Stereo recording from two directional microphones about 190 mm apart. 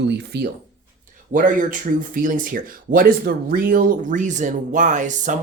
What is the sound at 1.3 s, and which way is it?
Speech, 45° right (ahead or behind).